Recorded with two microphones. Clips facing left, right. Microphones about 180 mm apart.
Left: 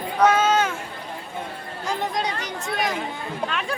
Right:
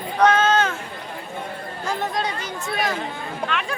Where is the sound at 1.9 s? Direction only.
15° left (ahead or behind).